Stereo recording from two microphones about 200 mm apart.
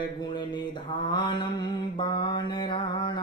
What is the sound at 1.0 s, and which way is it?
Mantra, 25° left (ahead or behind).